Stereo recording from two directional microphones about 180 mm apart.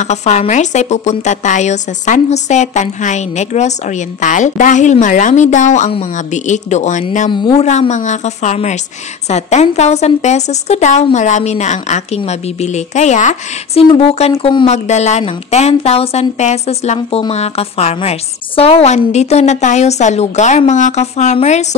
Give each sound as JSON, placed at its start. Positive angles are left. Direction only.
{"t": 0.0, "sound": "a woman's voice", "side_deg": 40}
{"t": 7.2, "sound": "speech", "side_deg": 25}
{"t": 7.6, "sound": "a woman's voice", "side_deg": 40}